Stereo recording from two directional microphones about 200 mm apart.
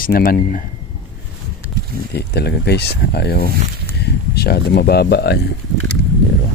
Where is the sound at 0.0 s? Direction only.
45° left (ahead or behind).